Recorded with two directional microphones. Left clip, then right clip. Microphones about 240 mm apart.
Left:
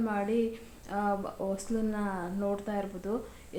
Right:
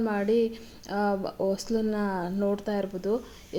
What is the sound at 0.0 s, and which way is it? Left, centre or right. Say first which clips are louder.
Speech: right 5 dB; right.